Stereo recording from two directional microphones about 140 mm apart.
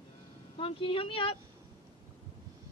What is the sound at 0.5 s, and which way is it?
Speech, 40° left (ahead or behind).